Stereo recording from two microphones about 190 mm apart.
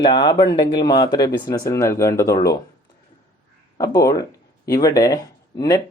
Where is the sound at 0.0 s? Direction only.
20° left (ahead or behind).